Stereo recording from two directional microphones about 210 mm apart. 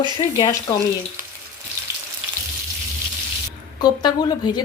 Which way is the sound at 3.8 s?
20° left (ahead or behind).